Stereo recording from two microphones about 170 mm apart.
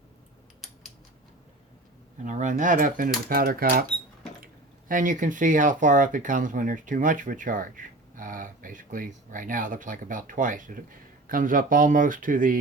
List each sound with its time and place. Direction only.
2.2 s speech: 45° right (ahead or behind)
4.9 s speech: 50° right (ahead or behind)